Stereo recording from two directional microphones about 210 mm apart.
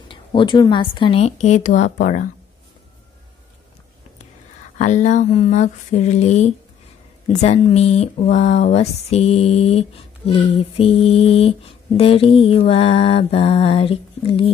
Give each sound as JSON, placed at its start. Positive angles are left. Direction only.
{"t": 0.1, "sound": "speech", "side_deg": 25}
{"t": 4.7, "sound": "a sound", "side_deg": 35}
{"t": 7.2, "sound": "speech", "side_deg": 30}